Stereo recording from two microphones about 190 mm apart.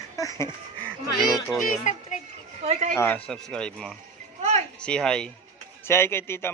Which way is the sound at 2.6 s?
35° right (ahead or behind).